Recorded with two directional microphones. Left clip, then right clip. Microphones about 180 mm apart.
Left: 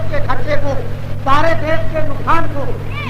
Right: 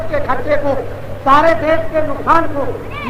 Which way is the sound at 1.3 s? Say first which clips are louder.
Right 4 dB; 30° right (ahead or behind).